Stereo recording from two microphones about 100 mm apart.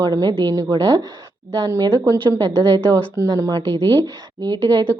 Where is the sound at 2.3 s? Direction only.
45° right (ahead or behind).